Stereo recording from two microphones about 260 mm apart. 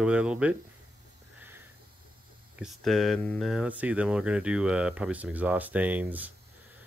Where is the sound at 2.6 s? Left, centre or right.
Centre.